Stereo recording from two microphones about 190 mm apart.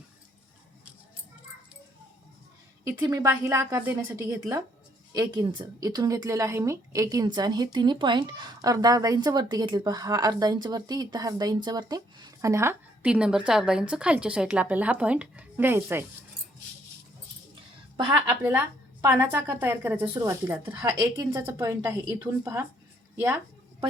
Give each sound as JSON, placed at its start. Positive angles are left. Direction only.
{"t": 2.8, "sound": "a woman's voice", "side_deg": -20}
{"t": 17.9, "sound": "a woman's voice", "side_deg": -25}
{"t": 18.3, "sound": "a woman's voice", "side_deg": -10}